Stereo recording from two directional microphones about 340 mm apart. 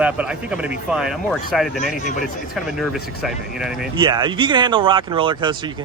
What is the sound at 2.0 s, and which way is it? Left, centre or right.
Speech, left.